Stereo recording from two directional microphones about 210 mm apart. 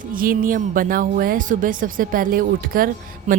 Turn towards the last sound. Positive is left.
turn(degrees=-35)  # may be behind; listen again after turning